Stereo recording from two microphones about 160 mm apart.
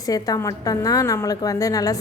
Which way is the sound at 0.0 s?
20° left (ahead or behind).